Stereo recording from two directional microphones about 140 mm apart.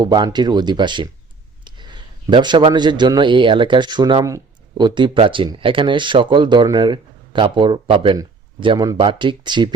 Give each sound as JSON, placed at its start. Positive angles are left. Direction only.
{"t": 0.0, "sound": "a man's voice", "side_deg": -30}
{"t": 4.9, "sound": "speech", "side_deg": -35}